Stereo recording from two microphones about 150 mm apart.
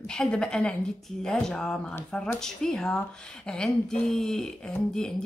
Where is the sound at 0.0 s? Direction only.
5° left (ahead or behind).